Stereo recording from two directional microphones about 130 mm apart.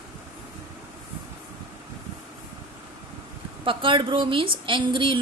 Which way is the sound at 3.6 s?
40° right (ahead or behind).